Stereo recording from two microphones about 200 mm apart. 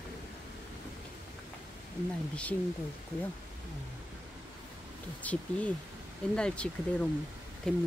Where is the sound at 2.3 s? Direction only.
5° left (ahead or behind).